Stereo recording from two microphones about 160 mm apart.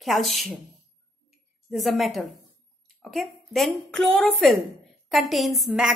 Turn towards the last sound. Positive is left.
turn(degrees=-5)  # may be behind; listen again after turning